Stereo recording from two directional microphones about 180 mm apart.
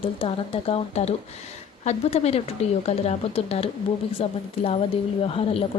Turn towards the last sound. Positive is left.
turn(degrees=30)  # may be behind; listen again after turning